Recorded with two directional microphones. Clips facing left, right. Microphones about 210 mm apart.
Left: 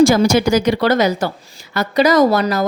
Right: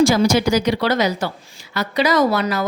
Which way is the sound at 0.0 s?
50° left (ahead or behind).